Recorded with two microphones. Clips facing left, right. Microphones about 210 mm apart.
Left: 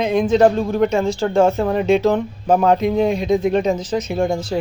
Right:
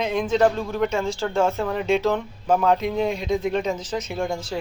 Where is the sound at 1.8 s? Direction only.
15° left (ahead or behind).